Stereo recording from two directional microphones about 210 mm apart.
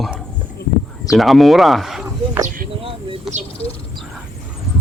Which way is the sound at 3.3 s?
35° right (ahead or behind).